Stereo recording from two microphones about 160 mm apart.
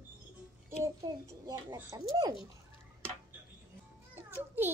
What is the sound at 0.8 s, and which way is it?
A child's voice, 20° right (ahead or behind).